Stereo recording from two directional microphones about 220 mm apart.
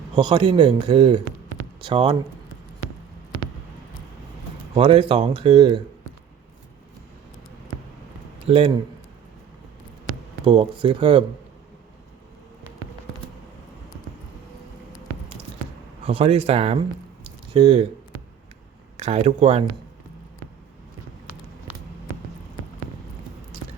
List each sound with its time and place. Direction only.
0.2 s speech: 20° right (ahead or behind)
4.7 s speech: 25° right (ahead or behind)
8.4 s speech: 25° right (ahead or behind)
10.4 s speech: 25° right (ahead or behind)
16.0 s speech: 25° right (ahead or behind)
18.9 s speech: 30° right (ahead or behind)